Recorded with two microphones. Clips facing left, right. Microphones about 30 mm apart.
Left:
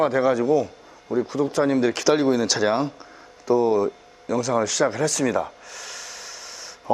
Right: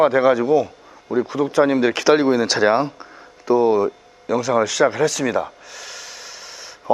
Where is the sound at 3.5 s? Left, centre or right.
Right.